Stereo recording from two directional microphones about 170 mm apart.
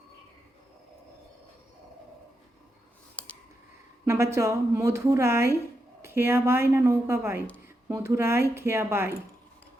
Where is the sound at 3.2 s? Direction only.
10° left (ahead or behind).